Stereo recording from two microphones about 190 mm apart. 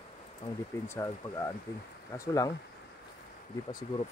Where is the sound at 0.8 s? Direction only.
15° left (ahead or behind).